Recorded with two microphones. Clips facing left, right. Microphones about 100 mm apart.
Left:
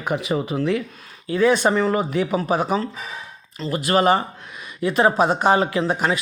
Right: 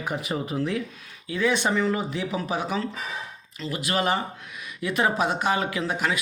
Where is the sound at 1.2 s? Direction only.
45° left (ahead or behind).